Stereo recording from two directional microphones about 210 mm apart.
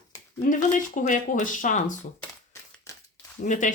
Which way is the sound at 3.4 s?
35° left (ahead or behind).